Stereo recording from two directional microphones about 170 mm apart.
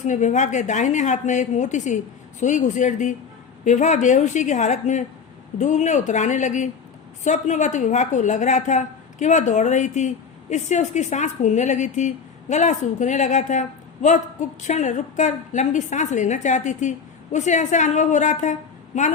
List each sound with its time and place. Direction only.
0.0 s a woman's voice: 45° left (ahead or behind)